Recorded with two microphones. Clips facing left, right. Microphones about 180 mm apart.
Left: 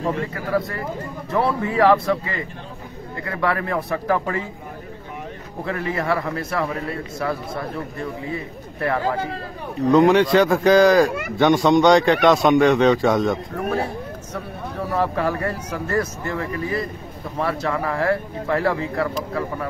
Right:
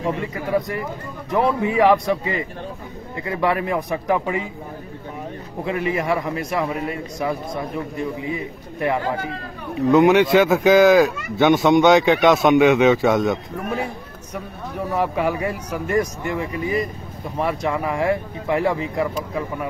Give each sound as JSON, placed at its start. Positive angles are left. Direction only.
{"t": 0.3, "sound": "speech", "side_deg": -20}
{"t": 5.7, "sound": "speech", "side_deg": -20}
{"t": 9.8, "sound": "a man's voice", "side_deg": 0}
{"t": 11.1, "sound": "speech", "side_deg": 70}
{"t": 11.3, "sound": "a man's voice", "side_deg": 0}
{"t": 14.3, "sound": "speech", "side_deg": -10}